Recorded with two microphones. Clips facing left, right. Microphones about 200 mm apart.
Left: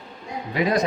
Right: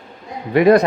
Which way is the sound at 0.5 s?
60° right (ahead or behind).